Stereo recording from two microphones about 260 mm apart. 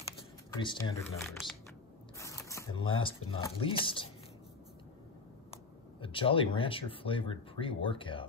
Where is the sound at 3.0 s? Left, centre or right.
Centre.